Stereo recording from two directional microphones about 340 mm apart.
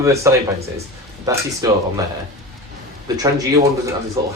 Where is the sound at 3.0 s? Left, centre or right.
Centre.